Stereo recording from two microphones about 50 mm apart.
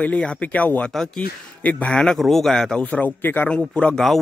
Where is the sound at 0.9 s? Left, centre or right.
Centre.